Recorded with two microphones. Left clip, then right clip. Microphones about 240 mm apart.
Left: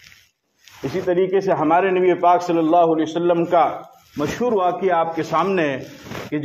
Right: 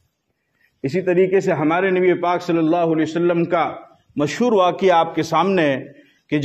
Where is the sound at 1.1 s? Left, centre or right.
Right.